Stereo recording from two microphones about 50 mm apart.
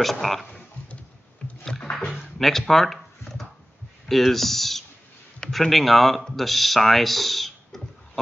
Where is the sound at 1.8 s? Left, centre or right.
Left.